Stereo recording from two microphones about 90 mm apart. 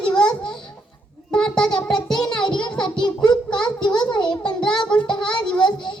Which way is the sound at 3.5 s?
10° left (ahead or behind).